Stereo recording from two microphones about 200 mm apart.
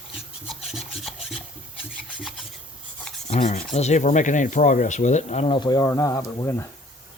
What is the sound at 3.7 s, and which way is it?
Speech, 35° left (ahead or behind).